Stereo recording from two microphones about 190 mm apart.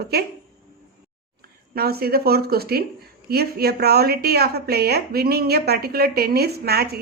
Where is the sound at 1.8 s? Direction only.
55° right (ahead or behind).